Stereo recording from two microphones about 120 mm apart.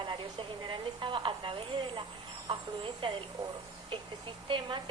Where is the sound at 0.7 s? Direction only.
45° right (ahead or behind).